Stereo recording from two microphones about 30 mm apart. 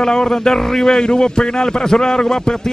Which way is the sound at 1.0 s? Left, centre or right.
Left.